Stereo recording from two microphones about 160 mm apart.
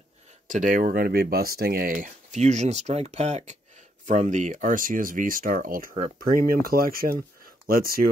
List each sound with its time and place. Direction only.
0.5 s speech: 55° right (ahead or behind)